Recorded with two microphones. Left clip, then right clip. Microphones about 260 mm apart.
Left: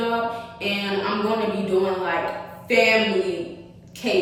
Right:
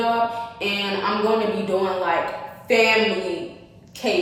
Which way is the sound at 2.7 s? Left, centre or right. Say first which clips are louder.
Right 1 dB; centre.